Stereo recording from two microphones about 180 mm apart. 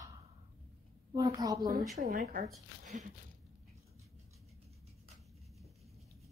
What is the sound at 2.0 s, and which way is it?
Speech, 50° right (ahead or behind).